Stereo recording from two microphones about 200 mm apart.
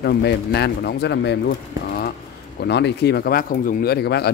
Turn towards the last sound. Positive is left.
turn(degrees=55)  # may be behind; listen again after turning